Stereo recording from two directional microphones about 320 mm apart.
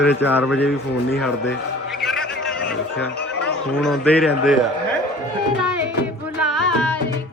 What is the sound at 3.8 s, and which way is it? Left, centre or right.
Speech, centre.